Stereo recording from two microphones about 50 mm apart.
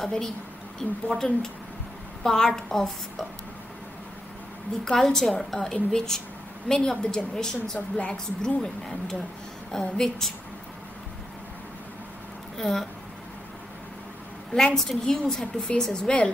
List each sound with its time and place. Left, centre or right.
0.0 s a woman's voice: centre
4.8 s a woman's voice: centre
12.5 s speech: centre
14.5 s a woman's voice: centre